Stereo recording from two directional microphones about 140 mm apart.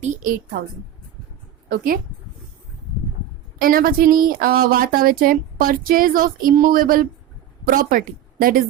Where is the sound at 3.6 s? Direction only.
90° right.